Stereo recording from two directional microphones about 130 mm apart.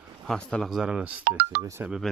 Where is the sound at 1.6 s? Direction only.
25° right (ahead or behind).